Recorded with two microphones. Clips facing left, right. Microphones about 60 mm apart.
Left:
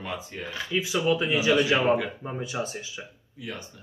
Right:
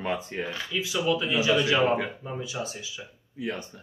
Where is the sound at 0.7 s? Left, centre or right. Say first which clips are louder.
Left 3 dB; left.